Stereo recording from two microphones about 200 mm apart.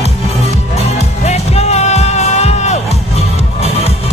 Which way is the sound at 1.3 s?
35° left (ahead or behind).